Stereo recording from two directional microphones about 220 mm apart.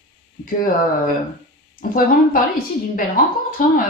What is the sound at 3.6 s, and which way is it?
Speech, 40° left (ahead or behind).